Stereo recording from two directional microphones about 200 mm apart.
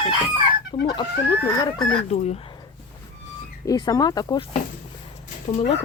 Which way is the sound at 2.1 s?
35° left (ahead or behind).